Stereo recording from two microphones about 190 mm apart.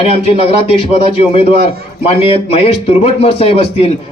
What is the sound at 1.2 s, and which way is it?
A man's voice, 30° left (ahead or behind).